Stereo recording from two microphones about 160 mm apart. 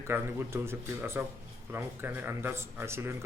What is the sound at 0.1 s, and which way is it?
Speech, 15° right (ahead or behind).